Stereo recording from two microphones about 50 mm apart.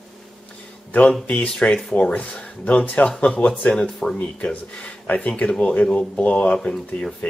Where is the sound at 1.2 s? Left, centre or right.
Left.